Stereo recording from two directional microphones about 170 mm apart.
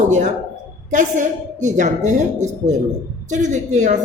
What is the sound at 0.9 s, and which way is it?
Speech, 50° right (ahead or behind).